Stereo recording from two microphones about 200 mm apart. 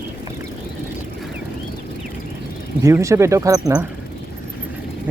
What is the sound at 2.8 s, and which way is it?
Speech, 15° right (ahead or behind).